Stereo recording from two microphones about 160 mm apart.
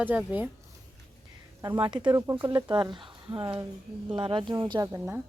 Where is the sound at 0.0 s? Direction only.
10° right (ahead or behind).